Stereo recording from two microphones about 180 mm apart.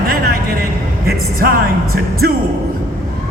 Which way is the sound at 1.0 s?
55° right (ahead or behind).